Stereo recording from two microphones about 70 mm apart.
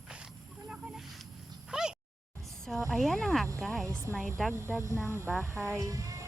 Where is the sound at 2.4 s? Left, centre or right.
Centre.